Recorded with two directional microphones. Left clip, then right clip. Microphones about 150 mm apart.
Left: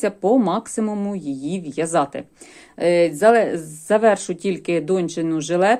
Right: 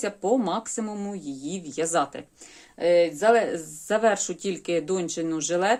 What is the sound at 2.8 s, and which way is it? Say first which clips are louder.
Speech: left 5 dB; 40° left (ahead or behind).